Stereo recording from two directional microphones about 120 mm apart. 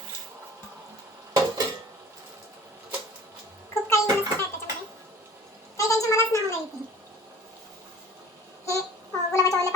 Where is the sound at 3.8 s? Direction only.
25° left (ahead or behind).